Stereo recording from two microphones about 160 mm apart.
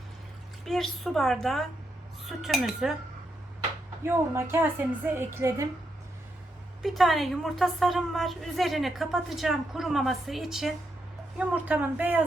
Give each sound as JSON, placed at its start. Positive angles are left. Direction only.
{"t": 0.6, "sound": "a woman's voice", "side_deg": 0}
{"t": 4.0, "sound": "a woman's voice", "side_deg": -15}
{"t": 6.8, "sound": "a woman's voice", "side_deg": 0}